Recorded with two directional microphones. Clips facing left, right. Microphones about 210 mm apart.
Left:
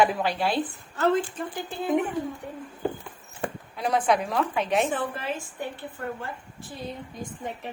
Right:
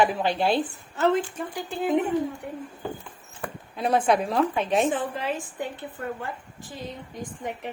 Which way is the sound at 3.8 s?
25° right (ahead or behind).